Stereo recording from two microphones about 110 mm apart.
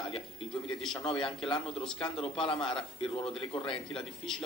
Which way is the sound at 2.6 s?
5° left (ahead or behind).